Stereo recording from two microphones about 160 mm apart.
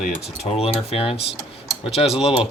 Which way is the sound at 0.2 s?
40° left (ahead or behind).